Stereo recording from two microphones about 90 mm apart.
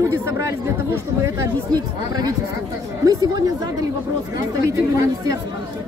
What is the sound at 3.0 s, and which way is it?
Speech, 45° right (ahead or behind).